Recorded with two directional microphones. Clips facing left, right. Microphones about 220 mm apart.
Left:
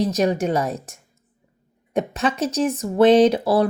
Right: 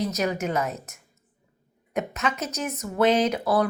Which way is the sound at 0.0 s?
30° left (ahead or behind).